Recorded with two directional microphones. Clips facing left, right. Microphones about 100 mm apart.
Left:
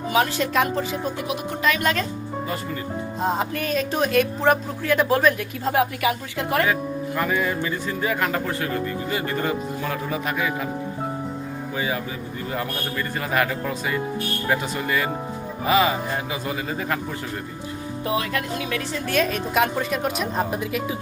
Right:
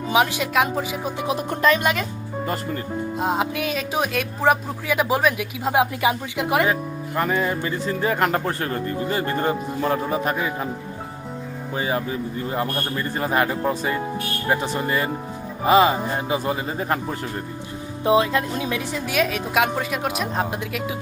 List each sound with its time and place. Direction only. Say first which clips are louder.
0.1 s speech: right 1 dB; 10° right (ahead or behind)
1.5 s a man's voice: right 5 dB; 40° right (ahead or behind)
1.8 s speech: even; 10° right (ahead or behind)
3.2 s speech: right 1 dB; 5° right (ahead or behind)
5.7 s speech: right 2 dB; 20° right (ahead or behind)
7.2 s a man's voice: right 2 dB; 30° right (ahead or behind)
11.8 s a man's voice: right 4 dB; 35° right (ahead or behind)
18.0 s speech: right 7 dB; 20° right (ahead or behind)
19.0 s a woman's voice: left 1 dB; 10° right (ahead or behind)